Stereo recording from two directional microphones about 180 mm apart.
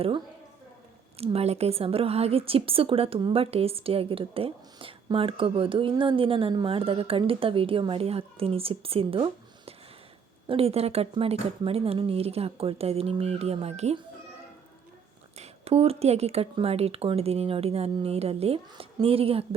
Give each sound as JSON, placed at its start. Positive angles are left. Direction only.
{"t": 1.2, "sound": "a woman's voice", "side_deg": -35}
{"t": 15.4, "sound": "a woman's voice", "side_deg": -35}